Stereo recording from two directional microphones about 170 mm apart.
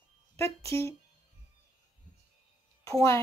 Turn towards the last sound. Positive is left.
turn(degrees=20)  # may be behind; listen again after turning